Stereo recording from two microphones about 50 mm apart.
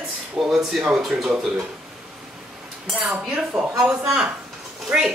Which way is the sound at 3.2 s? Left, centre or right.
Centre.